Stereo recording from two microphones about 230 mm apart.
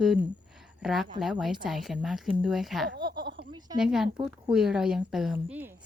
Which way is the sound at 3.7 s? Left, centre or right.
Centre.